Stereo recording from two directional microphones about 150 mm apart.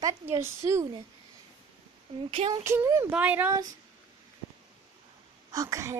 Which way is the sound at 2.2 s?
35° right (ahead or behind).